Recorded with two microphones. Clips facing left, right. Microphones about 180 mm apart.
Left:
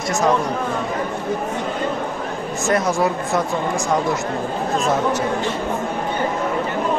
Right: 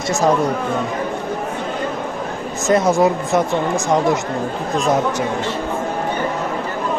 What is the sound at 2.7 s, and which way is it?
Speech, 20° right (ahead or behind).